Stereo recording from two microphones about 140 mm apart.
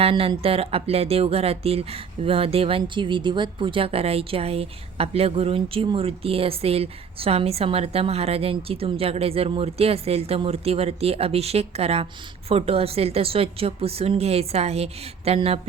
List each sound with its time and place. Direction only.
0.0 s speech: 40° right (ahead or behind)